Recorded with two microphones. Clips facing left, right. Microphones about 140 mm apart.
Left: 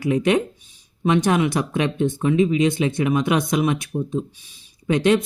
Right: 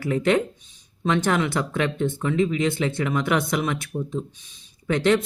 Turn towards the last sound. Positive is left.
turn(degrees=15)  # may be behind; listen again after turning